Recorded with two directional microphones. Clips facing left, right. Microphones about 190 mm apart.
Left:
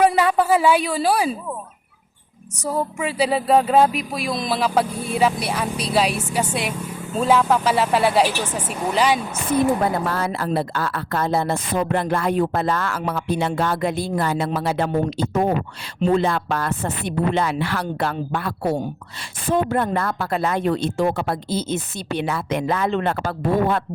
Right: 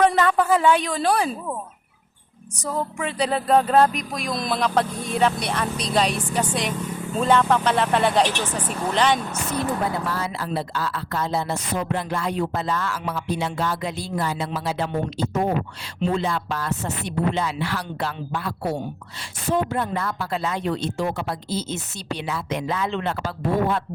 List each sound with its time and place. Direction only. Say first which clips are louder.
0.0 s music: left 2 dB; 10° left (ahead or behind)
2.7 s music: left 3 dB; 5° left (ahead or behind)
10.1 s speech: left 4 dB; 55° left (ahead or behind)